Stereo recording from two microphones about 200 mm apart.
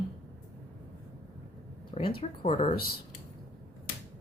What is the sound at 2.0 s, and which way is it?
Speech, 25° left (ahead or behind).